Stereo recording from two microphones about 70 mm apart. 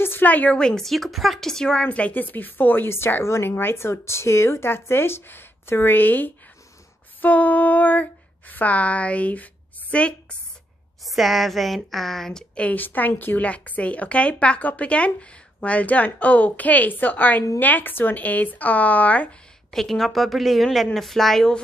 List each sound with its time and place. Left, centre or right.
0.0 s a sound: left
0.6 s a woman's voice: centre
1.9 s speech: left
7.2 s a sound: left
11.1 s a woman's voice: centre
12.6 s a woman's voice: left
19.7 s a woman's voice: centre